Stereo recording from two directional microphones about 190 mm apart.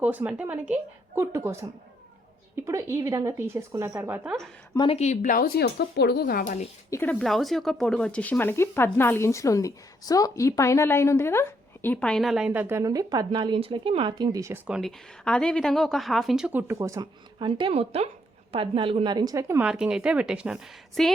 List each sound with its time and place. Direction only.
0.0 s a woman's voice: 10° right (ahead or behind)
2.6 s a woman's voice: 15° right (ahead or behind)
4.7 s speech: 25° left (ahead or behind); by 6.7 s 45° left (ahead or behind)
6.9 s speech: 10° left (ahead or behind); by 14.6 s 15° right (ahead or behind)
14.7 s a woman's voice: centre (ahead or behind)